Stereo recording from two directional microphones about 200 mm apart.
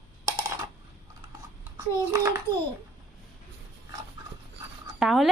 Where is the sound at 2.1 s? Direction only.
15° right (ahead or behind).